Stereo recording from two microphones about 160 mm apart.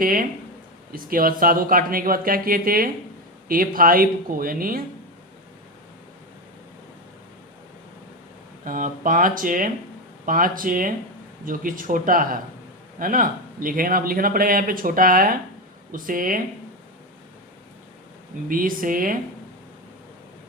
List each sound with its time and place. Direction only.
0.0 s a man's voice: 60° right (ahead or behind)
8.6 s a man's voice: 55° right (ahead or behind)
18.4 s a man's voice: 60° right (ahead or behind)